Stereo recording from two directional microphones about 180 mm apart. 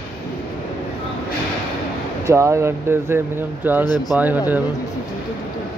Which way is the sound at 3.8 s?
20° left (ahead or behind).